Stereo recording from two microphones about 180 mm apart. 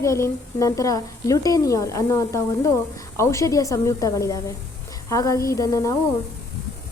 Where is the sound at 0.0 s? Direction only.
15° left (ahead or behind).